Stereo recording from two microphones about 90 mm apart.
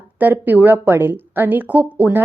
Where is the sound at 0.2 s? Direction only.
20° right (ahead or behind).